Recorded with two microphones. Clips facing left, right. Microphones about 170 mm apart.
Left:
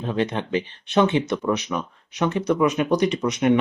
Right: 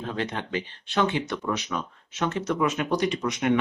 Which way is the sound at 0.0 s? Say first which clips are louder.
Left 6 dB; 20° left (ahead or behind).